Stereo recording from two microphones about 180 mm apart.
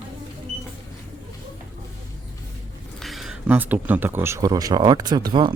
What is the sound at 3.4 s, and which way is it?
Speech, 10° right (ahead or behind).